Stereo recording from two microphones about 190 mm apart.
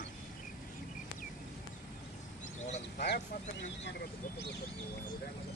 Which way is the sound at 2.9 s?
60° left (ahead or behind).